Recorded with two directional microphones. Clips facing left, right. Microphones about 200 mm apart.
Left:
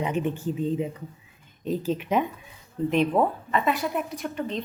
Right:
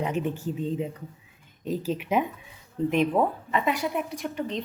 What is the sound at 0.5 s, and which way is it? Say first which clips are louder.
Speech: left 2 dB; 5° left (ahead or behind).